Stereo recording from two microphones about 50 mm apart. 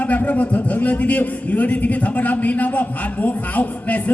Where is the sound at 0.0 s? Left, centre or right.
Left.